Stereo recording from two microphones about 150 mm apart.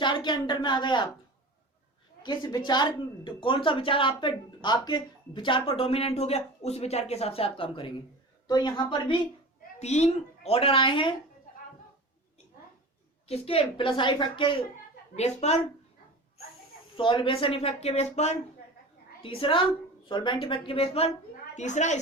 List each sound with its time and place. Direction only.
0.0 s speech: 30° left (ahead or behind)
2.2 s a woman's voice: 30° left (ahead or behind)
9.8 s speech: 45° left (ahead or behind)
13.2 s speech: 40° left (ahead or behind)
15.1 s a woman's voice: 45° left (ahead or behind)
17.0 s speech: 35° left (ahead or behind)
19.2 s speech: 35° left (ahead or behind)
21.5 s a woman's voice: 50° left (ahead or behind)